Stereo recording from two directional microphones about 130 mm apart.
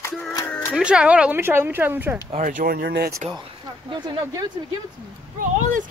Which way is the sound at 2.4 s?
90° right.